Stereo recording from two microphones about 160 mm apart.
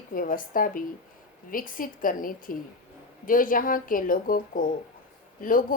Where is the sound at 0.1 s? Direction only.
60° left (ahead or behind).